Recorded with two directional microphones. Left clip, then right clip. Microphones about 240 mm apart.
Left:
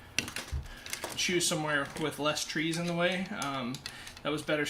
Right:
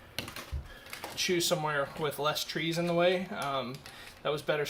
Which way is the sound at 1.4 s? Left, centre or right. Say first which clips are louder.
Right 1 dB; right.